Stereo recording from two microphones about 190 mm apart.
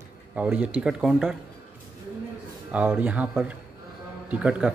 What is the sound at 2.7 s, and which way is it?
Speech, 5° right (ahead or behind).